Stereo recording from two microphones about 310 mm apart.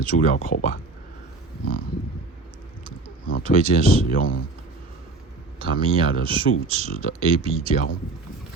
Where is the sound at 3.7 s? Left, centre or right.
Left.